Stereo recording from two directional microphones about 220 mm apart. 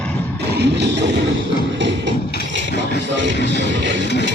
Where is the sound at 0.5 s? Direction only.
50° right (ahead or behind).